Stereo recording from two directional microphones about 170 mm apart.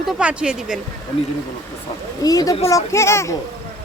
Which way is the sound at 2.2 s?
20° left (ahead or behind).